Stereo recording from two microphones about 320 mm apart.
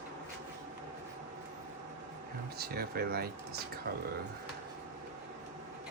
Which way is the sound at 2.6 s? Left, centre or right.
Right.